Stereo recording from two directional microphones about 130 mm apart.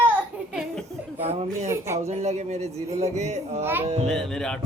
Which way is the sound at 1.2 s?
50° right (ahead or behind).